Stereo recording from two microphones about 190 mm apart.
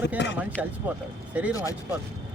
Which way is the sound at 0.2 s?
65° left (ahead or behind).